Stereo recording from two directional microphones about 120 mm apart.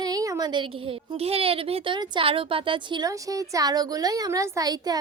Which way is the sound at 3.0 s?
30° right (ahead or behind).